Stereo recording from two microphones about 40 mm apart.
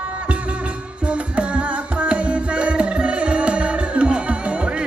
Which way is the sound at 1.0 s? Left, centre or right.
Right.